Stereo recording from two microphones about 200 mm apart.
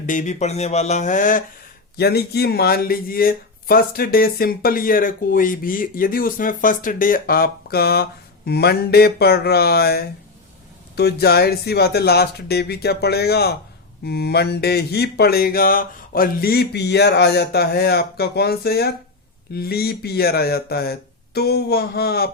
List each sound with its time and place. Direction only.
0.0 s speech: 40° left (ahead or behind)
2.0 s speech: 55° left (ahead or behind)